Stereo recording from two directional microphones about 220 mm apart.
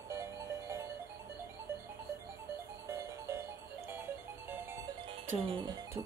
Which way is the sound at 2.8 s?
15° right (ahead or behind).